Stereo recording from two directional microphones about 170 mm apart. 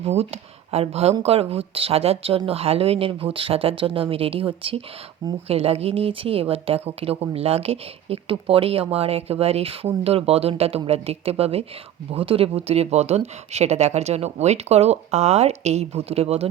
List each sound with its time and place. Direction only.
0.0 s speech: 40° right (ahead or behind)